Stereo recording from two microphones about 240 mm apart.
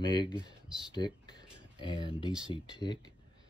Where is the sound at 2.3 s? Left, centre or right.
Centre.